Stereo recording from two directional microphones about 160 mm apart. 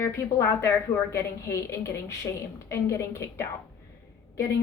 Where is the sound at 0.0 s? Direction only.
15° left (ahead or behind).